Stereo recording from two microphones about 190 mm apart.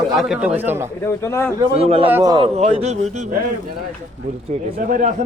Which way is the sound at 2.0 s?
15° right (ahead or behind).